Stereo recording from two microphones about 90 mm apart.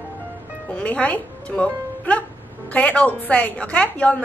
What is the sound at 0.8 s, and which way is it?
A woman's voice, 15° left (ahead or behind).